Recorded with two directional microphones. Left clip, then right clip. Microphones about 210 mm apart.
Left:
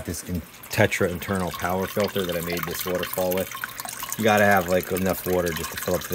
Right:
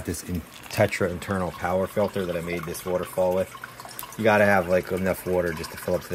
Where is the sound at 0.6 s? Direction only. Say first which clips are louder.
Left 1 dB; 30° left (ahead or behind).